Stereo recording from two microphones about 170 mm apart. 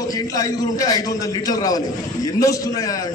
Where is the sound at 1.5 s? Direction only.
20° left (ahead or behind).